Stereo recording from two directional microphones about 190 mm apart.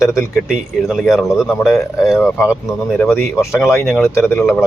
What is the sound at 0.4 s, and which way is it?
Speech, centre (ahead or behind).